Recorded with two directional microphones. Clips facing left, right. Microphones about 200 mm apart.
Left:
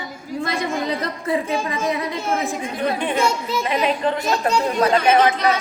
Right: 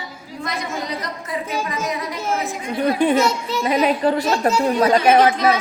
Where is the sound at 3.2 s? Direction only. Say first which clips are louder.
Right 1 dB; centre (ahead or behind).